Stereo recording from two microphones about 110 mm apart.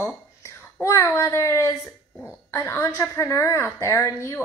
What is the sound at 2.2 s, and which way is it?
A woman's voice, 25° left (ahead or behind).